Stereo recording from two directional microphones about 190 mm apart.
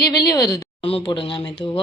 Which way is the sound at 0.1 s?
20° left (ahead or behind).